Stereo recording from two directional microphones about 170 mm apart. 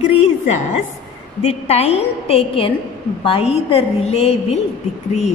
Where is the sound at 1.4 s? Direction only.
35° left (ahead or behind).